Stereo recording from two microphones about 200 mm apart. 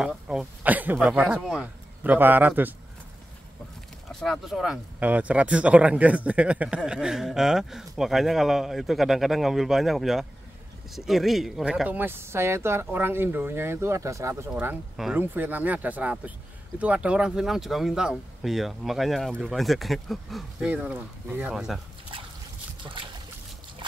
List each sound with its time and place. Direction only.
0.0 s speech: 5° right (ahead or behind)
4.1 s speech: centre (ahead or behind)
23.8 s a sound: 25° right (ahead or behind)